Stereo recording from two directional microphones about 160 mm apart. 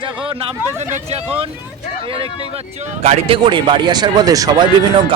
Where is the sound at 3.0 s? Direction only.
40° right (ahead or behind).